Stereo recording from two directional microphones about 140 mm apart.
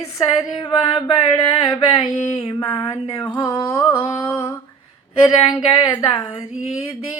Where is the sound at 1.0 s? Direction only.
30° left (ahead or behind).